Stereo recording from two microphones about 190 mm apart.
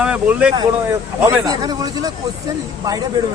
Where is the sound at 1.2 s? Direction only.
20° right (ahead or behind).